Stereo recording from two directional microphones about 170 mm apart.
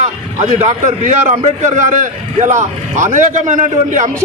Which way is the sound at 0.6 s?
45° right (ahead or behind).